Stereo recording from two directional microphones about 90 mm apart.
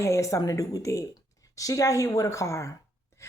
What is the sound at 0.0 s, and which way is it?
A woman's voice, 35° left (ahead or behind).